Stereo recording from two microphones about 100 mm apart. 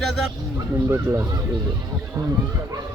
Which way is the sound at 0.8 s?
25° right (ahead or behind).